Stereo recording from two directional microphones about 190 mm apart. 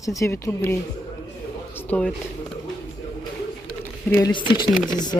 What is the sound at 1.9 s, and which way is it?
Speech, 5° left (ahead or behind).